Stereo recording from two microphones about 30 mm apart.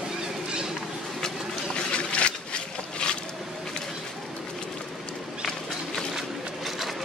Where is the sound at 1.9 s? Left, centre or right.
Left.